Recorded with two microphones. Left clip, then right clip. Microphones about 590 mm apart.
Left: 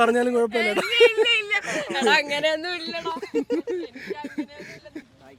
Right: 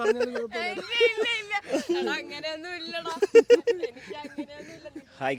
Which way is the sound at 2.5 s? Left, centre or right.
Left.